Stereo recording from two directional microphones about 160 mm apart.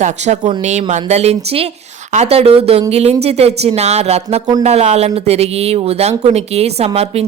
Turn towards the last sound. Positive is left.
turn(degrees=-40)  # may be behind; listen again after turning